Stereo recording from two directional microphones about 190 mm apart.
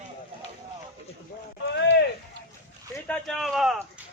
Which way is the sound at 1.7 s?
65° left (ahead or behind).